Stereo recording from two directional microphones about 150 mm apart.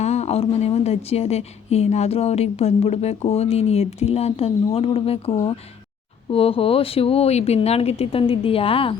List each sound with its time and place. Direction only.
0.0 s a woman's voice: 45° left (ahead or behind)